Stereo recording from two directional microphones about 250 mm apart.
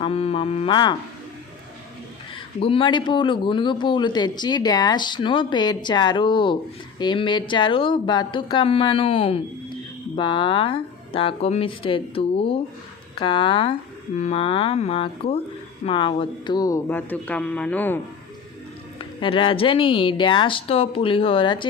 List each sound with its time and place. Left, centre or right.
0.0 s speech: left
2.6 s a man's voice: left
18.9 s speech: left